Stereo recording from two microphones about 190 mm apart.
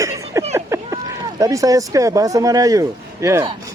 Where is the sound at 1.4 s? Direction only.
15° right (ahead or behind).